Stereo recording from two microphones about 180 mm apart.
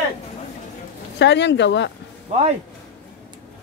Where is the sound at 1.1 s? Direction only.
75° left (ahead or behind).